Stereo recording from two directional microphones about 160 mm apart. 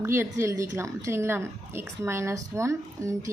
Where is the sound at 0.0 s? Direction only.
15° right (ahead or behind).